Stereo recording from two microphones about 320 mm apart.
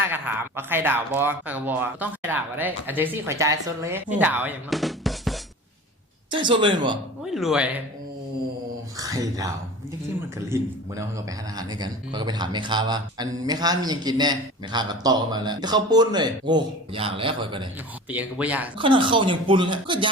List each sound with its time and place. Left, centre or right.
0.0 s speech: centre
6.3 s a man's voice: centre
7.2 s speech: centre
9.0 s a man's voice: centre
18.1 s speech: centre
18.8 s a man's voice: centre